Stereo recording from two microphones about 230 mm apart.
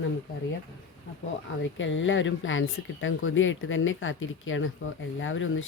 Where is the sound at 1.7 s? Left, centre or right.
Left.